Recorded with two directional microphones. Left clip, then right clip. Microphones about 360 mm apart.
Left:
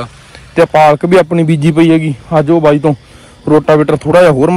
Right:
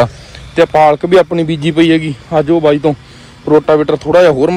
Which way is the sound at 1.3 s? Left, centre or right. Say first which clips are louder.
Left 2 dB; centre.